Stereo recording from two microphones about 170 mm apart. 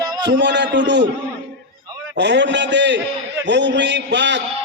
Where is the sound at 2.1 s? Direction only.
90° right.